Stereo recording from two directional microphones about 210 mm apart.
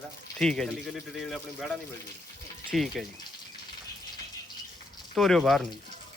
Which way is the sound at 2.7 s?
Centre (ahead or behind).